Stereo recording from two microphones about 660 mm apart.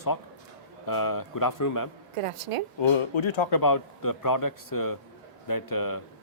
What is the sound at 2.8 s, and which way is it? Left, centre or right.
A man's voice, left.